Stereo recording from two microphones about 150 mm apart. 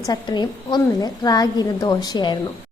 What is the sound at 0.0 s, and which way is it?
A woman's voice, 30° left (ahead or behind).